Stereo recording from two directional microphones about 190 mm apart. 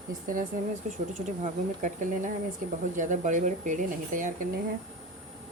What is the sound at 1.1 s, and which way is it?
Speech, 40° right (ahead or behind).